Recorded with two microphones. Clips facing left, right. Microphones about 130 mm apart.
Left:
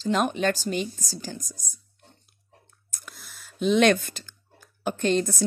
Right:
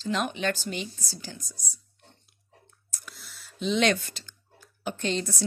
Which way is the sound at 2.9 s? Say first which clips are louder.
Left 1 dB; 50° left (ahead or behind).